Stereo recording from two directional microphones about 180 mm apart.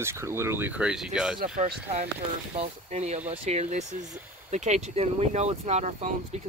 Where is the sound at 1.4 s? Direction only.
45° right (ahead or behind).